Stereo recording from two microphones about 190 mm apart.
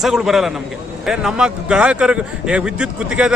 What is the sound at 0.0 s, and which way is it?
Speech, centre (ahead or behind).